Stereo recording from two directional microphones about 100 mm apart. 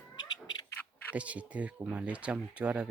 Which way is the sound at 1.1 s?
15° right (ahead or behind).